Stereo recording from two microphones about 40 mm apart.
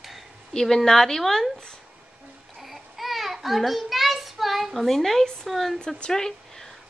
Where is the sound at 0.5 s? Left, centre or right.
Centre.